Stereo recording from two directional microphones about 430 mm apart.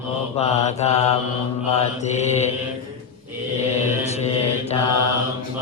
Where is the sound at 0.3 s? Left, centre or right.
Centre.